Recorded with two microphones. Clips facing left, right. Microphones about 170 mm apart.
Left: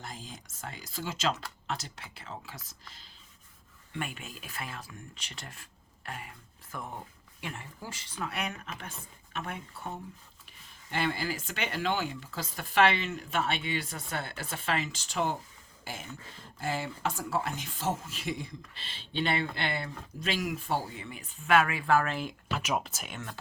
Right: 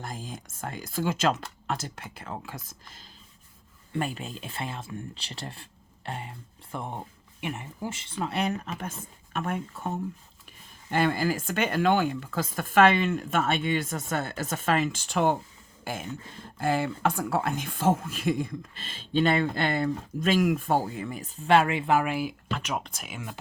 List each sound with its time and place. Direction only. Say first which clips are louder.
0.0 s speech: right 6 dB; 50° right (ahead or behind)
3.9 s speech: right 7 dB; 35° right (ahead or behind); by 22.4 s 10° right (ahead or behind)
22.4 s speech: even; 5° left (ahead or behind)